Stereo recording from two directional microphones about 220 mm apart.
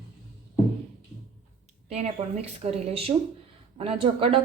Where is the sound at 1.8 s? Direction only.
30° right (ahead or behind).